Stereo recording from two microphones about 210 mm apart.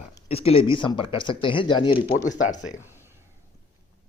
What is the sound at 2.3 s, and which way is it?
Speech, 35° left (ahead or behind).